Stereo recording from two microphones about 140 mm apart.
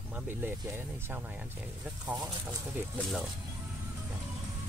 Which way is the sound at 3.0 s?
Centre (ahead or behind).